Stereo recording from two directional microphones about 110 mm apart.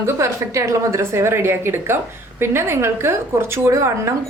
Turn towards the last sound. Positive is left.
turn(degrees=-25)  # may be behind; listen again after turning